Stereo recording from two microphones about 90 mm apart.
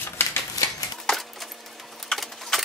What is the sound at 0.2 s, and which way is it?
Typewriter, 25° left (ahead or behind).